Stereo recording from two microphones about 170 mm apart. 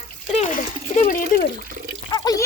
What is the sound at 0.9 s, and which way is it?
Speech, 50° left (ahead or behind).